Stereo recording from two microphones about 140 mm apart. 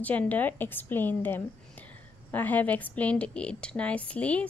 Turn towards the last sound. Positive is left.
turn(degrees=10)  # may be behind; listen again after turning